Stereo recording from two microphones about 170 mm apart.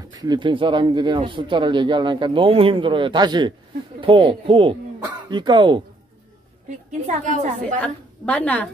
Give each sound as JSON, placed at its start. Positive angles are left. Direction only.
{"t": 0.1, "sound": "speech", "side_deg": -25}
{"t": 6.9, "sound": "a woman's voice", "side_deg": -45}
{"t": 7.8, "sound": "a woman's voice", "side_deg": 10}